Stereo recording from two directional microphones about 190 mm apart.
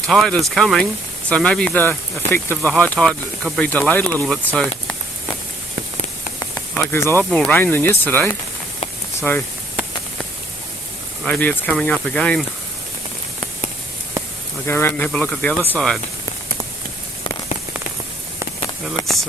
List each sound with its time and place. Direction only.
0.1 s speech: centre (ahead or behind)
6.4 s a sound: 15° left (ahead or behind)
6.8 s speech: 10° left (ahead or behind)
11.3 s speech: 10° left (ahead or behind)
14.7 s speech: 10° left (ahead or behind)
19.0 s speech: 25° left (ahead or behind)